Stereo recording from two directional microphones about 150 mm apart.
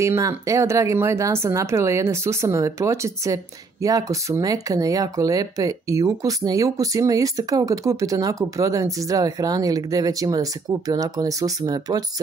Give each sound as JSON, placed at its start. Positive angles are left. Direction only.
{"t": 0.0, "sound": "speech", "side_deg": -20}